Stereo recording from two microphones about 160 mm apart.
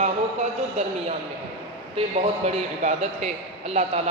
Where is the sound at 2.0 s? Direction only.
40° right (ahead or behind).